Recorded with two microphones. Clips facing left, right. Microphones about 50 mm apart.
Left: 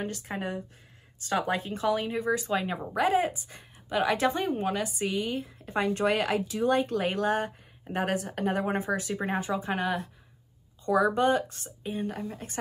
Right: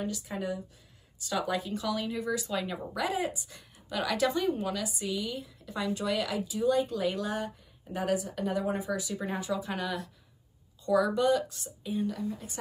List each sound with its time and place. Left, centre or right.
0.0 s speech: left